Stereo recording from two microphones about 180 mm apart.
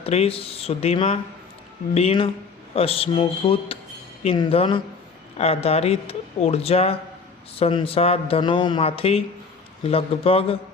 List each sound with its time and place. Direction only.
0.0 s speech: 35° left (ahead or behind)